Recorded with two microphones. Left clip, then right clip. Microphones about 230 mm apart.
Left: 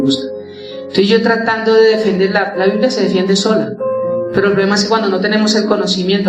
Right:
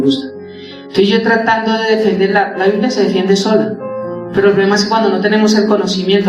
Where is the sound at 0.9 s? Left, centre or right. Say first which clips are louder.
Even; left.